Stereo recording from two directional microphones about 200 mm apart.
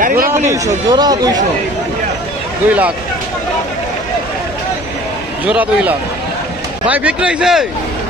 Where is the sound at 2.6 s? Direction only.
10° right (ahead or behind).